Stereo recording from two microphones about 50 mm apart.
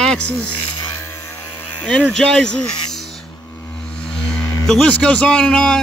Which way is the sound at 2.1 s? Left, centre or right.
Centre.